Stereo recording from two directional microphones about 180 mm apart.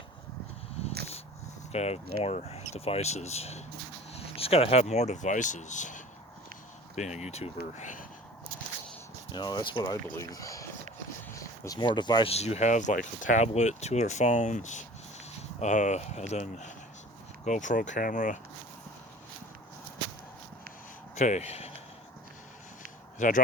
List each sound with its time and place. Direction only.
1.7 s speech: 35° left (ahead or behind)
9.3 s speech: 25° left (ahead or behind); by 18.3 s 45° left (ahead or behind)
21.2 s speech: 40° left (ahead or behind)
23.1 s speech: 45° left (ahead or behind)